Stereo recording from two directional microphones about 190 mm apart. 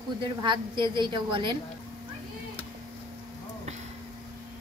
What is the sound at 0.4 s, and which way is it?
A woman's voice, 25° right (ahead or behind).